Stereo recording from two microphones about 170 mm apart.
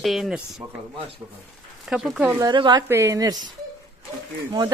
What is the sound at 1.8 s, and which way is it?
Speech, centre (ahead or behind).